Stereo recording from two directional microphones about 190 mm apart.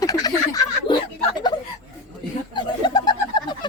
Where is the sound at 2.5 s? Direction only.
25° left (ahead or behind).